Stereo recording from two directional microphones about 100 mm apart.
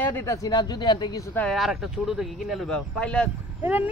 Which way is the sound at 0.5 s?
45° left (ahead or behind).